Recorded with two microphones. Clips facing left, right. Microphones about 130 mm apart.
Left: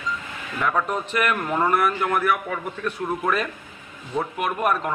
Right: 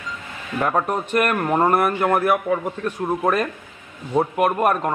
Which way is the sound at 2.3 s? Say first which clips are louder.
Right 7 dB; 30° right (ahead or behind).